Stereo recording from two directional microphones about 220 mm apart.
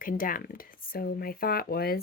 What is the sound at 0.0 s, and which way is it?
Speech, 40° left (ahead or behind).